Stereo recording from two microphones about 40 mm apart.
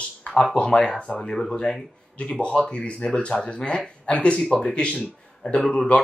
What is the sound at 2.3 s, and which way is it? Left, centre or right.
Speech, left.